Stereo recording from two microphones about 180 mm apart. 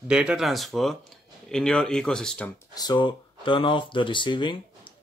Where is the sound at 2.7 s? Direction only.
25° left (ahead or behind).